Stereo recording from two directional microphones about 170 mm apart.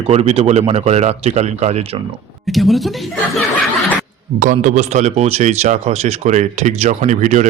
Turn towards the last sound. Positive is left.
turn(degrees=-45)  # may be behind; listen again after turning